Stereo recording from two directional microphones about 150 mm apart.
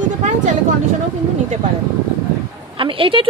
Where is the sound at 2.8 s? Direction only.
35° right (ahead or behind).